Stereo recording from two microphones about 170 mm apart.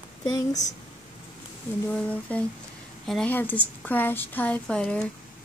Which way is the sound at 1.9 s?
10° left (ahead or behind).